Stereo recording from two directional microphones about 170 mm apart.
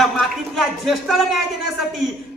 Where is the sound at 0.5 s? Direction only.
Centre (ahead or behind).